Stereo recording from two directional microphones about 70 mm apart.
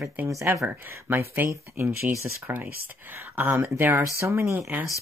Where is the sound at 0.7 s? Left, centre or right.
Right.